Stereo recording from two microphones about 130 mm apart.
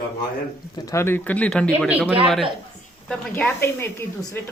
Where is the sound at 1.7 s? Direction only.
10° right (ahead or behind).